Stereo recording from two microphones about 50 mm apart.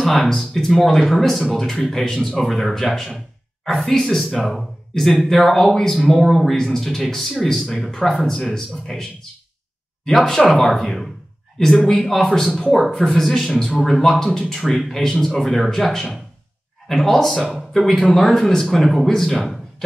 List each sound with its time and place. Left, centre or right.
0.0 s speech: centre
10.1 s speech: centre